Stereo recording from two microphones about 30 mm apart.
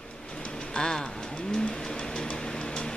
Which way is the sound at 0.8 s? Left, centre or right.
Left.